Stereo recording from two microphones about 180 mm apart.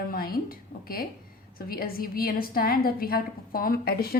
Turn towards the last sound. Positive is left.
turn(degrees=60)  # may be behind; listen again after turning